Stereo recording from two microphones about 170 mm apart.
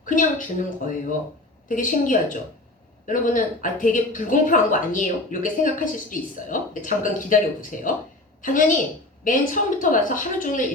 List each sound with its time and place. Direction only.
0.0 s a woman's voice: 50° left (ahead or behind)